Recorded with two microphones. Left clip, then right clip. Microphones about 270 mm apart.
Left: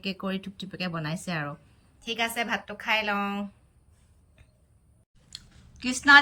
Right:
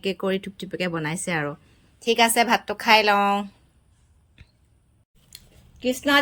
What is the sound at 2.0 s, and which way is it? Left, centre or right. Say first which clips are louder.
A woman's voice: right 10 dB; centre.